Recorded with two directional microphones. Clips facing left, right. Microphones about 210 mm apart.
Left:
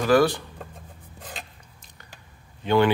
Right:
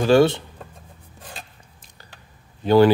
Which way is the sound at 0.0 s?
25° right (ahead or behind).